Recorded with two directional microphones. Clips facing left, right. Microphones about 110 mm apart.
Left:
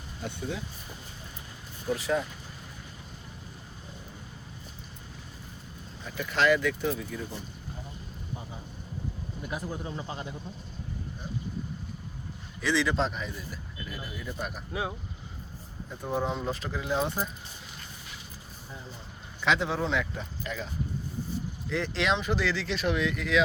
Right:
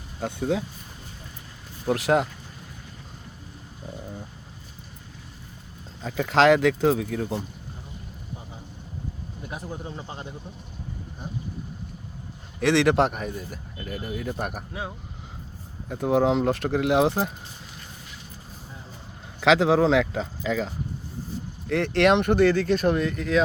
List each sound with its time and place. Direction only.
1.9 s speech: 90° right
6.0 s speech: 90° right
12.5 s speech: 70° right (ahead or behind)
14.7 s speech: 5° left (ahead or behind)
15.9 s speech: 85° right
19.4 s speech: 90° right
21.7 s speech: 60° right (ahead or behind); by 23.4 s 40° right (ahead or behind)